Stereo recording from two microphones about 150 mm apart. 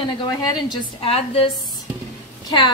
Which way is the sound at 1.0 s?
40° left (ahead or behind).